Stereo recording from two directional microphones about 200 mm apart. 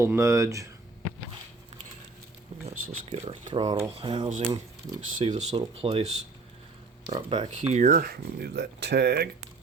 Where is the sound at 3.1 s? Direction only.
30° right (ahead or behind).